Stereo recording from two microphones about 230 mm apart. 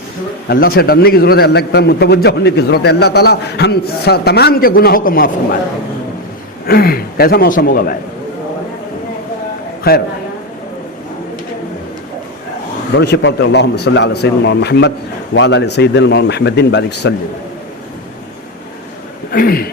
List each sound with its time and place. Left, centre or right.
0.4 s a man's voice: left
6.7 s a man's voice: left
9.9 s a man's voice: left
12.9 s a man's voice: left
19.3 s a man's voice: left